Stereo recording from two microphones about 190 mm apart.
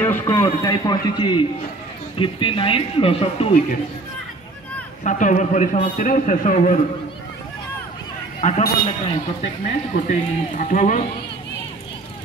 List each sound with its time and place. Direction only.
0.0 s speech: 15° left (ahead or behind); by 3.6 s 30° left (ahead or behind)
5.0 s a man's voice: 40° left (ahead or behind)
8.4 s speech: 40° left (ahead or behind)